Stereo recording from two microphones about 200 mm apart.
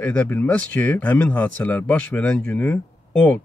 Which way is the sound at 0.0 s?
5° left (ahead or behind).